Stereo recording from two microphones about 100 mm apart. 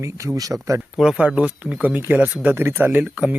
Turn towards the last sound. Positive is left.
turn(degrees=-15)  # may be behind; listen again after turning